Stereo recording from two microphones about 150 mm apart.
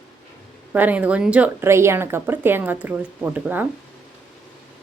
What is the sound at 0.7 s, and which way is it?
Speech, 10° right (ahead or behind).